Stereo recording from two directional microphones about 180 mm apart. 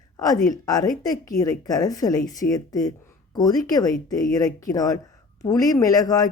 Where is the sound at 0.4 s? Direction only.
20° left (ahead or behind).